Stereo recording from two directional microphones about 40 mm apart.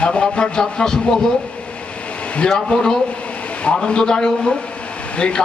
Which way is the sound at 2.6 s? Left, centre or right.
Centre.